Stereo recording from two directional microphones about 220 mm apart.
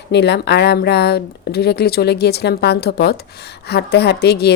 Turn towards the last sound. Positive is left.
turn(degrees=50)  # may be behind; listen again after turning